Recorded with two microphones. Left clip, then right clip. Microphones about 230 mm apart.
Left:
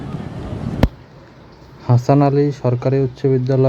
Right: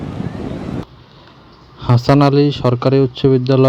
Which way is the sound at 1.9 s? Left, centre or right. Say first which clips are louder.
Right 2 dB; right.